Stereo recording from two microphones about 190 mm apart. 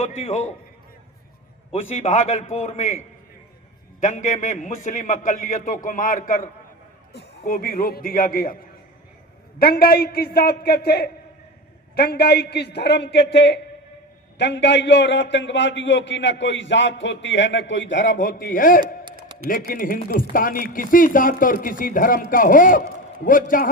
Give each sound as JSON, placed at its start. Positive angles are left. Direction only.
{"t": 0.0, "sound": "a man's voice", "side_deg": 35}
{"t": 1.7, "sound": "a man's voice", "side_deg": 35}
{"t": 4.0, "sound": "speech", "side_deg": 40}
{"t": 7.1, "sound": "speech", "side_deg": 55}
{"t": 9.6, "sound": "a man's voice", "side_deg": 55}
{"t": 18.2, "sound": "speech", "side_deg": 45}